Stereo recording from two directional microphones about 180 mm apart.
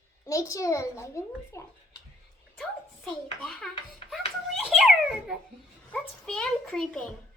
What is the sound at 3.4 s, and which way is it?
Speech, centre (ahead or behind).